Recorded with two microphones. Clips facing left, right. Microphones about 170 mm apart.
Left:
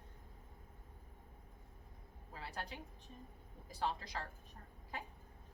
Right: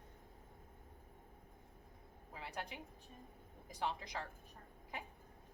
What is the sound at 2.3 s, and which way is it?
A woman's voice, 15° right (ahead or behind).